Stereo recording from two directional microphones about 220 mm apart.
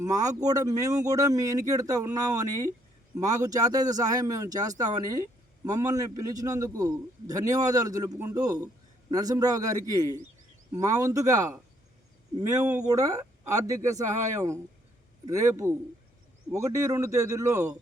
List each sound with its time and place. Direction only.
0.0 s speech: 15° right (ahead or behind)